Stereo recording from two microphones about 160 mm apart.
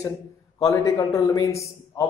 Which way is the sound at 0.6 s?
20° left (ahead or behind).